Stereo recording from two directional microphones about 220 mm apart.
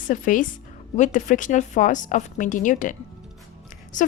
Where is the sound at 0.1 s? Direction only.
35° left (ahead or behind).